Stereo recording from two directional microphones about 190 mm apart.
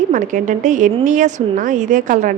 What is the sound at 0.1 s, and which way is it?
A woman's voice, 40° right (ahead or behind).